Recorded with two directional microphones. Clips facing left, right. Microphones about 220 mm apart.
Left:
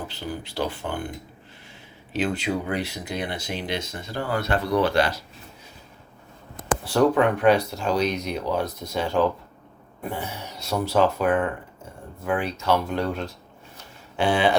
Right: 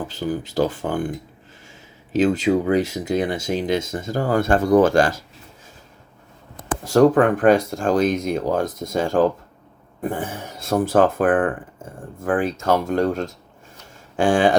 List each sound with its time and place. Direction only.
0.0 s speech: 45° right (ahead or behind)
2.1 s speech: 45° right (ahead or behind)
6.8 s speech: 45° right (ahead or behind)